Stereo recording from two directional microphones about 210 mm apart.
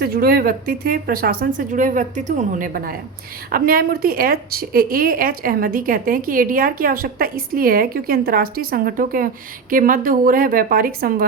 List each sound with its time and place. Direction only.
0.0 s a woman's voice: 45° right (ahead or behind)